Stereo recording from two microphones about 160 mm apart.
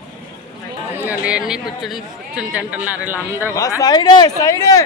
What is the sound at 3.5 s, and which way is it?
Speech, 20° left (ahead or behind).